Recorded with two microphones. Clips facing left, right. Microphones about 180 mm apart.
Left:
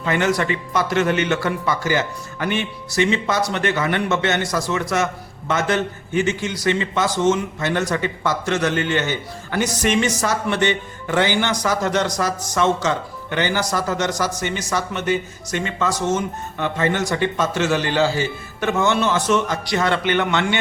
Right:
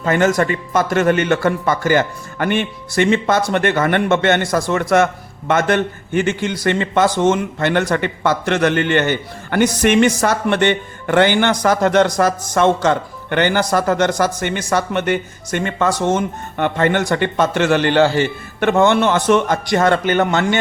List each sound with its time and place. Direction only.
0.0 s a man's voice: 45° right (ahead or behind)